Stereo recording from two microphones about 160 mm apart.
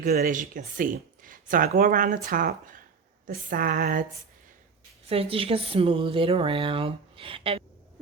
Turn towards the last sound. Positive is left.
turn(degrees=-35)  # may be behind; listen again after turning